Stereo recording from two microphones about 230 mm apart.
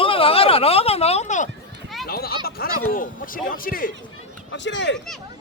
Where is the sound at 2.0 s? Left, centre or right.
Left.